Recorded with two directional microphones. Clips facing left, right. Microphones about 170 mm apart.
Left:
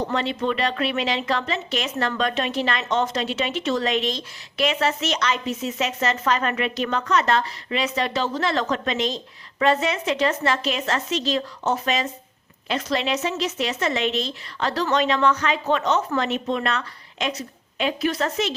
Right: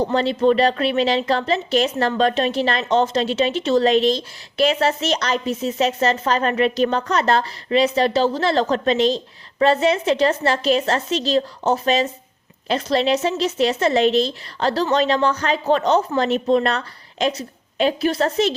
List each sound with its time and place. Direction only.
0.0 s speech: 35° right (ahead or behind)